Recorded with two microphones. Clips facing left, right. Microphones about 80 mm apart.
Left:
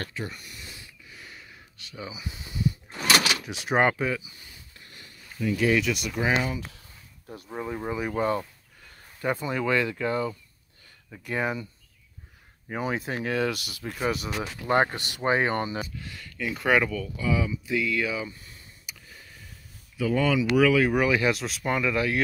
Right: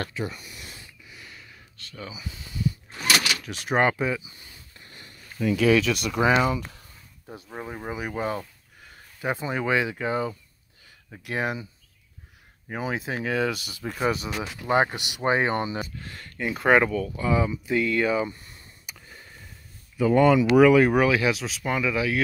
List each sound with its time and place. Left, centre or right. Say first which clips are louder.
1.1 s a sound: left 1 dB; centre
3.4 s speech: even; centre
4.8 s a sound: right 2 dB; right
5.4 s speech: right 3 dB; right
7.5 s speech: left 3 dB; centre
9.2 s speech: even; right
11.2 s speech: even; centre
12.7 s speech: even; centre
14.3 s speech: right 1 dB; centre
16.0 s speech: right 2 dB; right
20.0 s speech: right 6 dB; right
20.4 s speech: right 5 dB; right
21.0 s speech: right 2 dB; centre
21.3 s speech: even; centre